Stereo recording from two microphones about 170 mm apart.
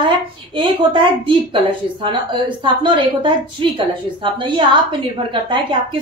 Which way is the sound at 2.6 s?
30° right (ahead or behind).